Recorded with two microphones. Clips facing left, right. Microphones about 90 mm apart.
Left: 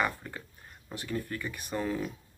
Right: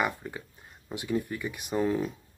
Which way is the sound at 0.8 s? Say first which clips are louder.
Right 5 dB; 15° right (ahead or behind).